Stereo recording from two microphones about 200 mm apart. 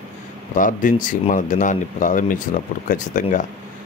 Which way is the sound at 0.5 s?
40° left (ahead or behind).